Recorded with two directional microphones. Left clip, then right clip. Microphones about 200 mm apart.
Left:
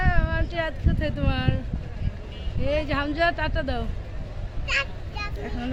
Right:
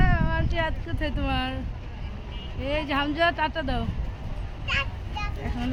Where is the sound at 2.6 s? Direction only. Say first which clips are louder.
Left 1 dB; 10° right (ahead or behind).